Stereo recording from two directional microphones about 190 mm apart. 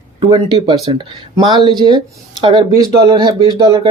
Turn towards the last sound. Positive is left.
turn(degrees=-20)  # may be behind; listen again after turning